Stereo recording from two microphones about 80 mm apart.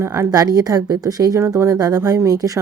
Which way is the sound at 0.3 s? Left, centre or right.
Right.